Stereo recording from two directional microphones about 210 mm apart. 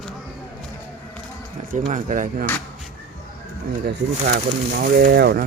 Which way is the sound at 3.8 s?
50° right (ahead or behind).